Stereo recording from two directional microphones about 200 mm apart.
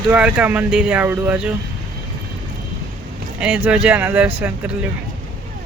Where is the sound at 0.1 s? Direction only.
5° right (ahead or behind).